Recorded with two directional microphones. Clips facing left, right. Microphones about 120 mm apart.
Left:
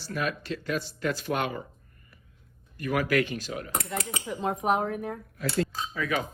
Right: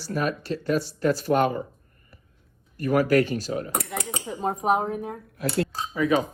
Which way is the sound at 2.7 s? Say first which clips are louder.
Right 6 dB; 40° right (ahead or behind).